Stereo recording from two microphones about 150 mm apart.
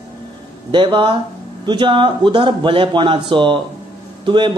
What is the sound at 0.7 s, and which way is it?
A man's voice, 35° right (ahead or behind).